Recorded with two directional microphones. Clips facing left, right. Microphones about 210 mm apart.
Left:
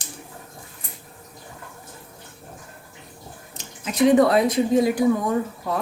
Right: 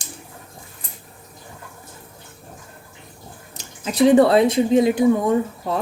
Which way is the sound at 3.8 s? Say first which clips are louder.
Right 3 dB; 35° right (ahead or behind).